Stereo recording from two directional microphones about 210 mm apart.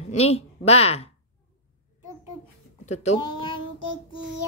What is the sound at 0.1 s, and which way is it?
A woman's voice, 30° left (ahead or behind).